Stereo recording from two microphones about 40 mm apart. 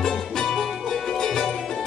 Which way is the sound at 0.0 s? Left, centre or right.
Centre.